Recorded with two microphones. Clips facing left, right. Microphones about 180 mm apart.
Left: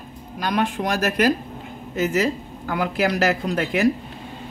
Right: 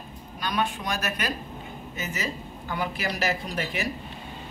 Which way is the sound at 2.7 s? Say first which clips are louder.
Left 8 dB; 90° left.